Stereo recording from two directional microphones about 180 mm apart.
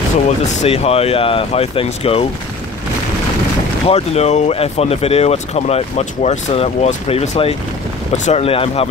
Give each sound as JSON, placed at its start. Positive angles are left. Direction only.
{"t": 0.6, "sound": "speech", "side_deg": 35}
{"t": 3.8, "sound": "speech", "side_deg": 35}